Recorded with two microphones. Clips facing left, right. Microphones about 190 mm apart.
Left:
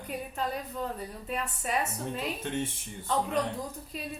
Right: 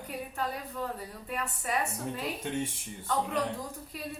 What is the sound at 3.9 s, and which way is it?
Speech, 20° left (ahead or behind).